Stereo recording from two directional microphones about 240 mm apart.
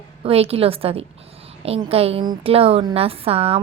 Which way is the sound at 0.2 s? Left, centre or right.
Right.